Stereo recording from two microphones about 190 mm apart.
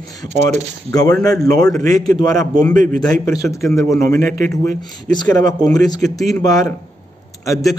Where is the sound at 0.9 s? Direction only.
20° left (ahead or behind).